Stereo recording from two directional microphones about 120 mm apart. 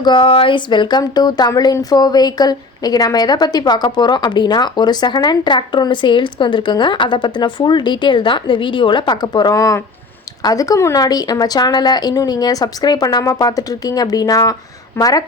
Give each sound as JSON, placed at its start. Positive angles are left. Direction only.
{"t": 0.0, "sound": "speech", "side_deg": 40}